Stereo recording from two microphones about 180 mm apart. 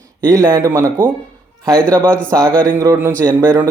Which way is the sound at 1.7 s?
5° left (ahead or behind).